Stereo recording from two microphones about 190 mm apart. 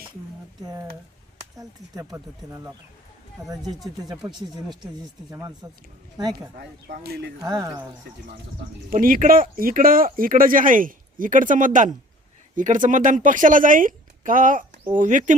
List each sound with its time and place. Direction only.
0.6 s speech: 20° right (ahead or behind)
3.6 s speech: centre (ahead or behind)
5.3 s speech: 20° right (ahead or behind)
6.6 s speech: 55° right (ahead or behind)
7.4 s speech: 20° right (ahead or behind)
8.9 s speech: 45° right (ahead or behind)